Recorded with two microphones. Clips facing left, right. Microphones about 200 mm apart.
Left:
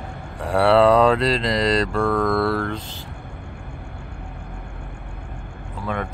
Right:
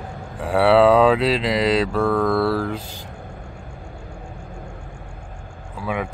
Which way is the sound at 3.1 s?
60° left (ahead or behind).